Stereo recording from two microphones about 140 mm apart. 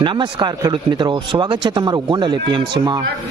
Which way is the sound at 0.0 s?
35° right (ahead or behind).